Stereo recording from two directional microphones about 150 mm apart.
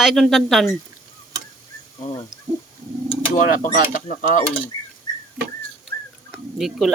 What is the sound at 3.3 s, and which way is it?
Speech, 60° left (ahead or behind).